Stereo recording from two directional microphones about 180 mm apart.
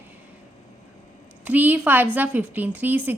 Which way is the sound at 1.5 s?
10° right (ahead or behind).